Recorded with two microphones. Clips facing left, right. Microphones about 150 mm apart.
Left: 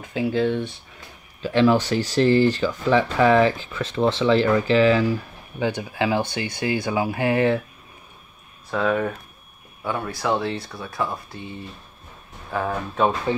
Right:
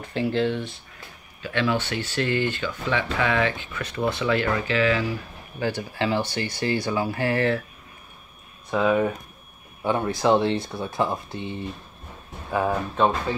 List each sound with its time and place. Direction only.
0.0 s speech: 10° left (ahead or behind)
1.4 s speech: 35° left (ahead or behind)
3.8 s speech: 25° left (ahead or behind)
5.6 s speech: 15° left (ahead or behind)
8.6 s speech: 5° right (ahead or behind)
9.8 s speech: 25° right (ahead or behind)
12.4 s speech: 10° right (ahead or behind)
13.0 s speech: 5° left (ahead or behind)